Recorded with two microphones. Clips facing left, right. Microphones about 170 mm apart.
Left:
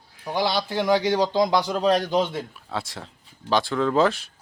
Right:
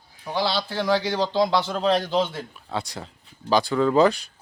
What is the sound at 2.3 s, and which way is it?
A man's voice, centre (ahead or behind).